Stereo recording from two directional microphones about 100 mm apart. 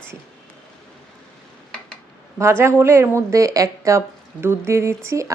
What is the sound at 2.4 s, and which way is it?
Speech, 25° right (ahead or behind).